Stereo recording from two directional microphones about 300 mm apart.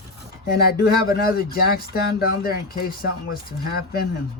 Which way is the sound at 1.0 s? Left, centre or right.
Left.